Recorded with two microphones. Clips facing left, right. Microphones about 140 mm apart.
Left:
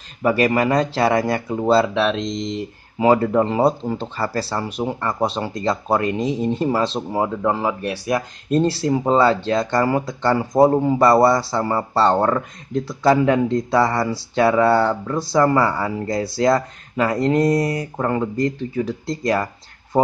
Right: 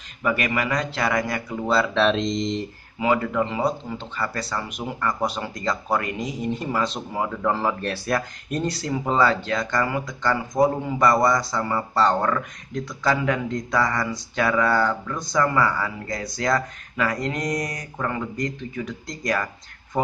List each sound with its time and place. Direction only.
0.2 s speech: 35° left (ahead or behind)
2.0 s speech: 5° left (ahead or behind)
3.0 s speech: 35° left (ahead or behind); by 8.2 s 15° left (ahead or behind)
8.5 s speech: 30° left (ahead or behind)